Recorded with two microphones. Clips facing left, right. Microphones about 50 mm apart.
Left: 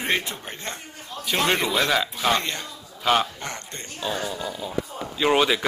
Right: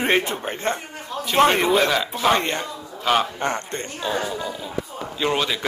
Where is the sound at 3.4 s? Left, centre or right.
Right.